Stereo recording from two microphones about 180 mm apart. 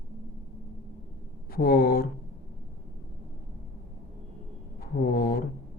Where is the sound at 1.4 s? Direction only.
55° left (ahead or behind).